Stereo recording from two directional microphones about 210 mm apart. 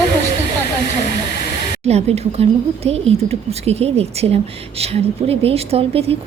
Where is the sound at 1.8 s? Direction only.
30° right (ahead or behind).